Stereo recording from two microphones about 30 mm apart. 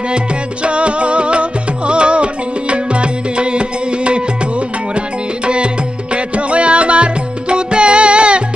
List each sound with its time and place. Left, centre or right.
0.6 s music: right